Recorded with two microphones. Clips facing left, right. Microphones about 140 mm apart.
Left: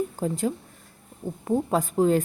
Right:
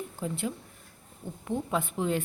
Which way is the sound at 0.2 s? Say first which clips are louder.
Left 7 dB; 40° left (ahead or behind).